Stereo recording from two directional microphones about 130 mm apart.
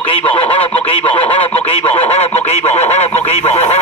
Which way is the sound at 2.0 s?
55° left (ahead or behind).